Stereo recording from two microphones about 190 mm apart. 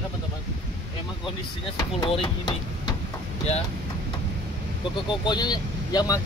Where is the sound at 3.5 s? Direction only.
35° left (ahead or behind).